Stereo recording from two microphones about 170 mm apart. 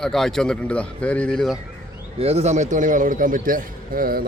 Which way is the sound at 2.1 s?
35° right (ahead or behind).